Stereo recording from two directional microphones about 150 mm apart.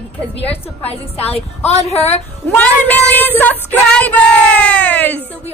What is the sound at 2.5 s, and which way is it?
Music, 10° left (ahead or behind).